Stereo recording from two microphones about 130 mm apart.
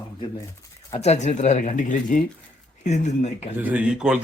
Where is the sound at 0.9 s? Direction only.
55° left (ahead or behind); by 2.2 s 75° left (ahead or behind).